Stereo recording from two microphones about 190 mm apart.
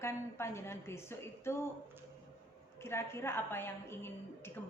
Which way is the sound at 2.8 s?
15° left (ahead or behind).